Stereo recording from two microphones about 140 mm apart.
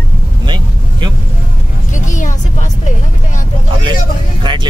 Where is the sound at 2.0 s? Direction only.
65° left (ahead or behind).